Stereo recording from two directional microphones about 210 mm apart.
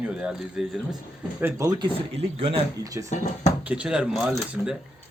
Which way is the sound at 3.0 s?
35° left (ahead or behind).